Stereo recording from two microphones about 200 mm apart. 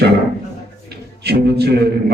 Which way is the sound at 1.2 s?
55° right (ahead or behind).